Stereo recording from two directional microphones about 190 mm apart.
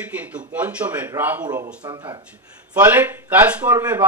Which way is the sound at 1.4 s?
20° right (ahead or behind).